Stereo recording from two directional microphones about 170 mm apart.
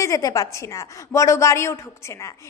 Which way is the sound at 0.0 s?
20° left (ahead or behind).